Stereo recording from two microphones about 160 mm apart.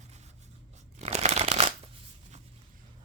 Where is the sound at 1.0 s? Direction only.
40° right (ahead or behind).